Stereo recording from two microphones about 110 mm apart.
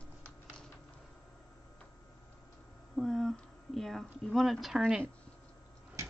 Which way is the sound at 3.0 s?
5° left (ahead or behind).